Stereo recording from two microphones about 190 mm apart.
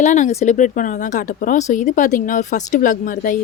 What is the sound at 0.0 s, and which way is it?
Speech, 40° left (ahead or behind).